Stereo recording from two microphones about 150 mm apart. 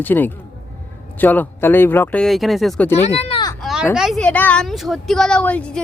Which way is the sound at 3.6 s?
Centre (ahead or behind).